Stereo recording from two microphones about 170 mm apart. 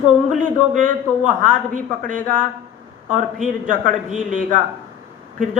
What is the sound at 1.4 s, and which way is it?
A woman's voice, 50° right (ahead or behind).